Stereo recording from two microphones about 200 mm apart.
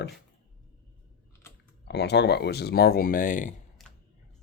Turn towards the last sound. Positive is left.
turn(degrees=0)  # may be behind; listen again after turning